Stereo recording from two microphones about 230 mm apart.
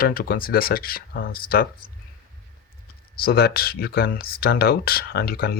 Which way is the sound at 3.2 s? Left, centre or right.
Left.